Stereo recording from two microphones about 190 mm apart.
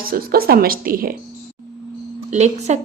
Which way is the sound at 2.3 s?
35° right (ahead or behind).